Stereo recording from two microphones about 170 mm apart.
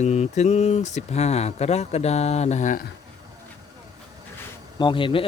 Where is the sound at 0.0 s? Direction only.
40° left (ahead or behind).